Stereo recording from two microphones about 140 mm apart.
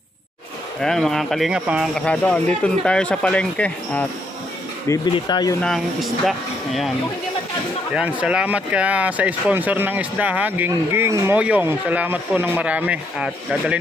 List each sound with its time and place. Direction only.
0.7 s speech: 5° left (ahead or behind)
2.0 s speech: 10° left (ahead or behind)
4.8 s speech: 25° left (ahead or behind)
5.6 s speech: centre (ahead or behind)
7.9 s speech: 10° right (ahead or behind)